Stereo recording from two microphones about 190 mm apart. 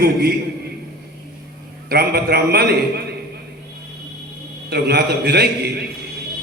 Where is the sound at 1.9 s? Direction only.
55° right (ahead or behind).